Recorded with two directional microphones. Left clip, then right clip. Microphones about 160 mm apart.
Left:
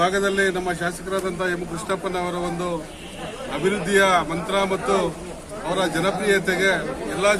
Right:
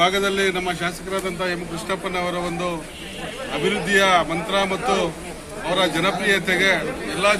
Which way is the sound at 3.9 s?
15° left (ahead or behind).